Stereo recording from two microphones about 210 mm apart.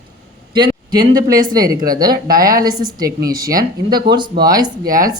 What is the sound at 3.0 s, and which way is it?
Speech, 45° right (ahead or behind).